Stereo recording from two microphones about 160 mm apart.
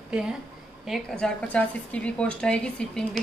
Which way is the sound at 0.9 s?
5° left (ahead or behind).